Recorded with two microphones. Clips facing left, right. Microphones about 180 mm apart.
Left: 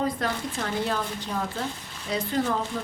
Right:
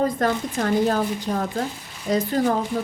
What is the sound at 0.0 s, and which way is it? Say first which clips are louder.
A woman's voice: right 6 dB; 45° right (ahead or behind).